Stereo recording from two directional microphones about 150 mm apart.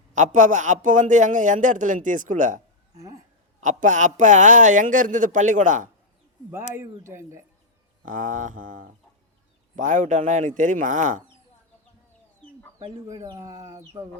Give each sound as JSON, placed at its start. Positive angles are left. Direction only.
{"t": 0.1, "sound": "a man's voice", "side_deg": -55}
{"t": 3.6, "sound": "a man's voice", "side_deg": -55}
{"t": 6.7, "sound": "speech", "side_deg": -15}
{"t": 8.0, "sound": "a man's voice", "side_deg": -60}
{"t": 12.8, "sound": "speech", "side_deg": -25}